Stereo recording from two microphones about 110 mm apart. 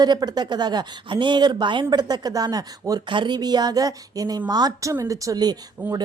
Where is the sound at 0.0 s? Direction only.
40° right (ahead or behind).